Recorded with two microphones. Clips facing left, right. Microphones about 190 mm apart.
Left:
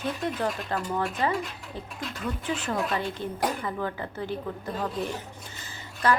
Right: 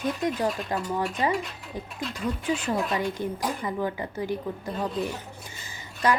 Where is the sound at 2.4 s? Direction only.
10° right (ahead or behind).